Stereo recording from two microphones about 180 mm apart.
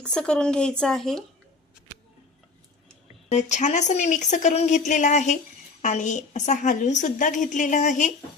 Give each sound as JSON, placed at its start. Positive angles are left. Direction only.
{"t": 0.0, "sound": "speech", "side_deg": 5}
{"t": 3.2, "sound": "a woman's voice", "side_deg": 40}